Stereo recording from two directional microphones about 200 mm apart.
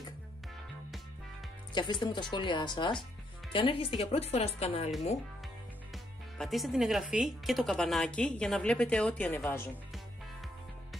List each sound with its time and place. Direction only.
1.7 s speech: 25° left (ahead or behind)
6.3 s speech: centre (ahead or behind)